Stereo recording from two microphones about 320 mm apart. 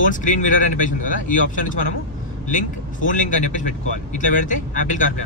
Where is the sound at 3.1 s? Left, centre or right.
Left.